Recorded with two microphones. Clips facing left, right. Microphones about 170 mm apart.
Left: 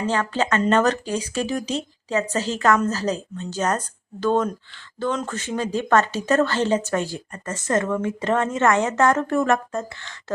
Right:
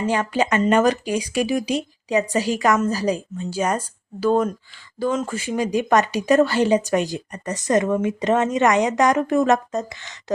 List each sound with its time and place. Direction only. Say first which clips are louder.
0.0 s speech: right 2 dB; 15° right (ahead or behind)